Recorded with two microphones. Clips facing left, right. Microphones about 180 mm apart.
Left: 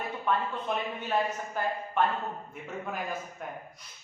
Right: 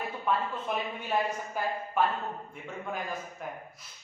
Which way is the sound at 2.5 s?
Centre (ahead or behind).